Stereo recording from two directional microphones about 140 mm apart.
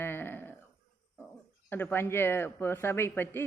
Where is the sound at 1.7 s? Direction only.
15° left (ahead or behind).